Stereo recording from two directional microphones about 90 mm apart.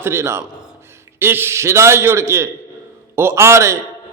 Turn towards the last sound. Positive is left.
turn(degrees=-30)  # may be behind; listen again after turning